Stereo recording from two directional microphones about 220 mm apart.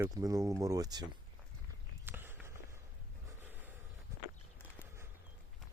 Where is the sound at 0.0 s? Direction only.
15° right (ahead or behind).